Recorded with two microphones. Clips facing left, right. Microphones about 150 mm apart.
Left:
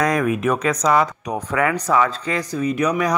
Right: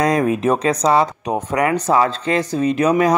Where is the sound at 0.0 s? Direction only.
25° right (ahead or behind).